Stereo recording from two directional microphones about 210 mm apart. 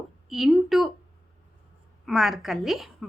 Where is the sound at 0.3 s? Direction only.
Centre (ahead or behind).